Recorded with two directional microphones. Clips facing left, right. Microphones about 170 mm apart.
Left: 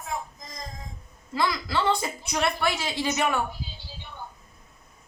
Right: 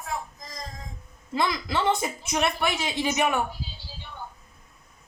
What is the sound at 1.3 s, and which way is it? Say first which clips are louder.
A woman's voice: even; 20° right (ahead or behind).